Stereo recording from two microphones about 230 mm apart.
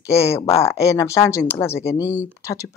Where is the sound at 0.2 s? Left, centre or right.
Left.